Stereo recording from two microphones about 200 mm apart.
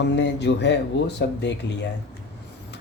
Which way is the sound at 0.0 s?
60° left (ahead or behind).